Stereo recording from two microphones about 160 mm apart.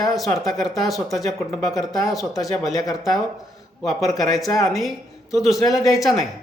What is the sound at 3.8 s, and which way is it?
Speech, centre (ahead or behind).